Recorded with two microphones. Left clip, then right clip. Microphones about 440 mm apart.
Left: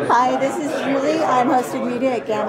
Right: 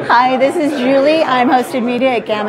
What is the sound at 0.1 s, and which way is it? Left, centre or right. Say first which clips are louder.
A woman's voice: right 7 dB; right.